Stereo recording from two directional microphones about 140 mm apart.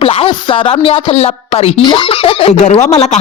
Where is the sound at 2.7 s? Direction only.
50° left (ahead or behind).